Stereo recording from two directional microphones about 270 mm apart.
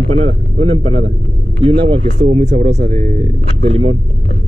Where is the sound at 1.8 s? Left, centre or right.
Centre.